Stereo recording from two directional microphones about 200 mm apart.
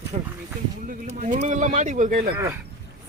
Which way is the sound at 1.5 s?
40° right (ahead or behind).